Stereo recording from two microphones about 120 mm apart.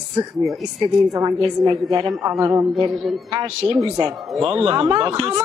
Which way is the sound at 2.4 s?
25° right (ahead or behind).